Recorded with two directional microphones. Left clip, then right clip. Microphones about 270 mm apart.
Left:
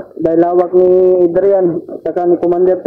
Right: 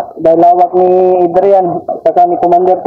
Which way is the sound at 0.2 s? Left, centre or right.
Centre.